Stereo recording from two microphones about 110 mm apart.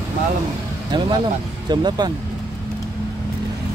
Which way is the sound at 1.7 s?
40° right (ahead or behind).